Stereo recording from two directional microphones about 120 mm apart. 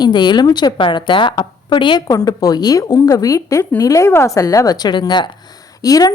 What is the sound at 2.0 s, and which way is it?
A woman's voice, 30° left (ahead or behind).